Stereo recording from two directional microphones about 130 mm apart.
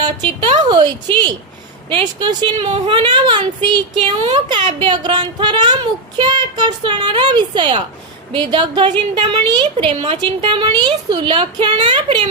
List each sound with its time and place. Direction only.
0.0 s a woman's voice: 35° right (ahead or behind)
2.6 s speech: 50° right (ahead or behind)
2.9 s a woman's voice: 40° right (ahead or behind)
9.8 s a woman's voice: 45° right (ahead or behind)